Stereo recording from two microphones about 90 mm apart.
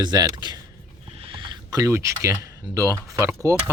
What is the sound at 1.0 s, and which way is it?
Rodents, 80° right.